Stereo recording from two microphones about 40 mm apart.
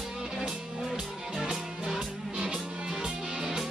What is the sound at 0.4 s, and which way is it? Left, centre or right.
Music, centre.